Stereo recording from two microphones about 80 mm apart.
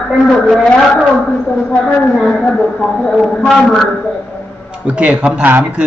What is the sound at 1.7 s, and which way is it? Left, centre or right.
Speech, centre.